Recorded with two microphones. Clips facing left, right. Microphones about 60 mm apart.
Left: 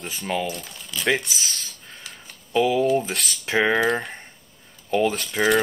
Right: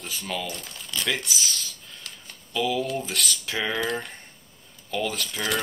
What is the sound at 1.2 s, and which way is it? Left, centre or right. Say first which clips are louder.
Cutlery: even; left.